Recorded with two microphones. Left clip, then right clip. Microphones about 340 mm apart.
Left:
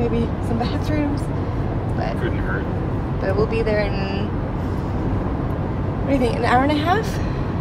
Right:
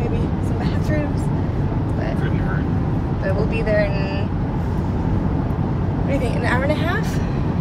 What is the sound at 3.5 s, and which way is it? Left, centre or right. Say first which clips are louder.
Speech: right 1 dB; centre.